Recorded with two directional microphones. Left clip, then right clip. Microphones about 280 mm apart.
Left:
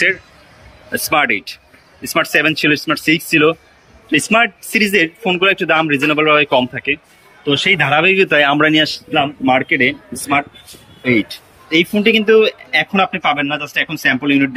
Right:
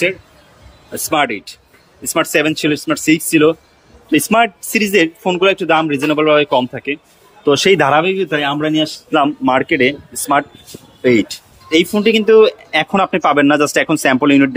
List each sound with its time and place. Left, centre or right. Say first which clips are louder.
1.1 s speech: left 1 dB; centre
8.2 s speech: left 5 dB; centre
8.7 s speech: even; centre